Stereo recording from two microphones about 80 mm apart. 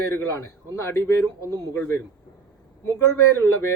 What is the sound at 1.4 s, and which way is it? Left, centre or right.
Speech, right.